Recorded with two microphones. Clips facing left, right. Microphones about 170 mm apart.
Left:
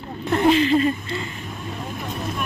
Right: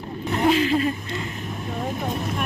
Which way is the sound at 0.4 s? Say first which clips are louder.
Left 2 dB; 5° right (ahead or behind).